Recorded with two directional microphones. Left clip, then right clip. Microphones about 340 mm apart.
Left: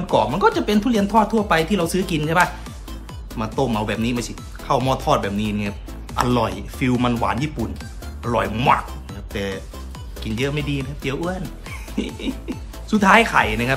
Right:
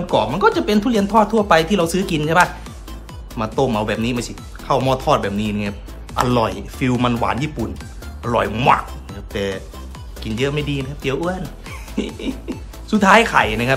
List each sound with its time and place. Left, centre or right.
0.0 s speech: centre